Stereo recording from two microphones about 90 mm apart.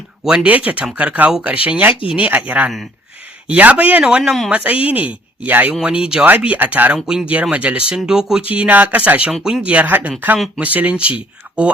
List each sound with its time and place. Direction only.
0.3 s speech: 10° right (ahead or behind)
4.2 s speech: centre (ahead or behind)
4.5 s speech: 15° right (ahead or behind)